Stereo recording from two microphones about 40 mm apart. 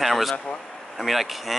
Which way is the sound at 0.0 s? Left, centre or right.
Centre.